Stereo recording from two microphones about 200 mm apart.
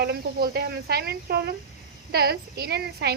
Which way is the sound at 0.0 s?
50° right (ahead or behind).